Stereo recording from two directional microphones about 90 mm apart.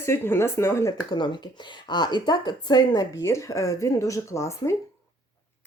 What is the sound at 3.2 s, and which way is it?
Speech, 35° left (ahead or behind).